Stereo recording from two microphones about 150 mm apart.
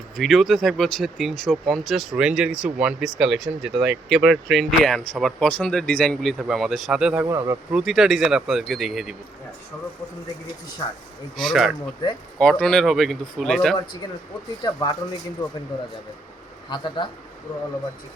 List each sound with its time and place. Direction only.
0.2 s speech: centre (ahead or behind); by 7.6 s 20° right (ahead or behind)
7.7 s speech: 5° right (ahead or behind)
10.8 s speech: 25° left (ahead or behind)
11.3 s speech: centre (ahead or behind)
14.6 s speech: 30° left (ahead or behind)
16.6 s speech: 30° left (ahead or behind)